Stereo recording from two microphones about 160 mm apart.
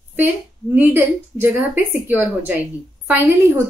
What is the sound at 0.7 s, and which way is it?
A woman's voice, 10° right (ahead or behind).